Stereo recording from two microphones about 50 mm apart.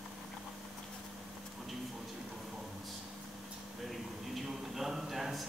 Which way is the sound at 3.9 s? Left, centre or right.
Centre.